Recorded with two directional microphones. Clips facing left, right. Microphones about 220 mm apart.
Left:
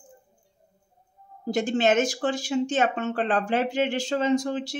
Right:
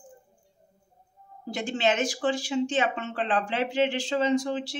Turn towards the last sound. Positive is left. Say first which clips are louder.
# left 2 dB
turn(degrees=45)  # may be behind; listen again after turning